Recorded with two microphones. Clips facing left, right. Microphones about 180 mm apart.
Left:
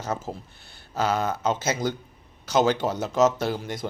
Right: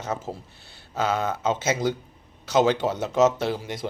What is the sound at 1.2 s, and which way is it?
Speech, 25° right (ahead or behind).